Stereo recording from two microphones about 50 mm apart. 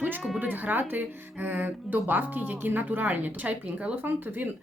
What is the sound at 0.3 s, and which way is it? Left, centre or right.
Speech, right.